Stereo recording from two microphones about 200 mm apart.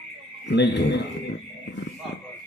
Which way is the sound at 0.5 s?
60° left (ahead or behind).